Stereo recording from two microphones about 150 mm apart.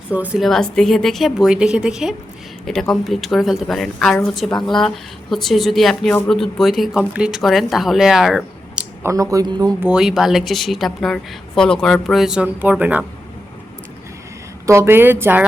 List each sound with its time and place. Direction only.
0.1 s speech: 10° right (ahead or behind)
9.0 s speech: 25° right (ahead or behind)
9.8 s speech: 5° right (ahead or behind)
14.7 s a woman's voice: 15° right (ahead or behind)